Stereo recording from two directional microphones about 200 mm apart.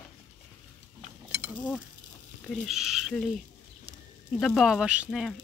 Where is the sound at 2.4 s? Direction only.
Centre (ahead or behind).